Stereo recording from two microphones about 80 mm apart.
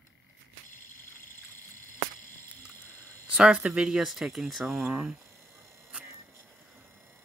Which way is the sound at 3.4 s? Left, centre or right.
Centre.